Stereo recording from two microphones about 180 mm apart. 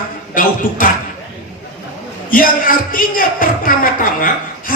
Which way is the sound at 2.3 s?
50° left (ahead or behind).